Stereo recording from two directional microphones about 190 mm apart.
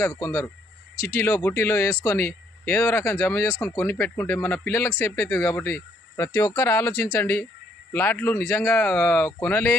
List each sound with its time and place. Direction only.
0.0 s speech: 15° left (ahead or behind)
0.9 s speech: 50° left (ahead or behind)
1.2 s speech: 15° left (ahead or behind)